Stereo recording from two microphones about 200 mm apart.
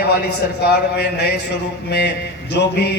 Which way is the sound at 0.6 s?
55° left (ahead or behind).